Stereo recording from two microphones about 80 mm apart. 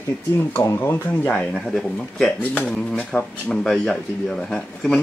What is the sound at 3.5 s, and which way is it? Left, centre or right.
Speech, centre.